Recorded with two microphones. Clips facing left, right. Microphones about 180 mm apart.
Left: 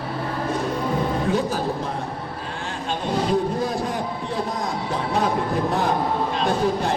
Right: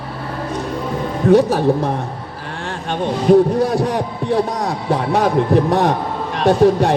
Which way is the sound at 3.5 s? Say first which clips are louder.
Right 7 dB; 70° right (ahead or behind).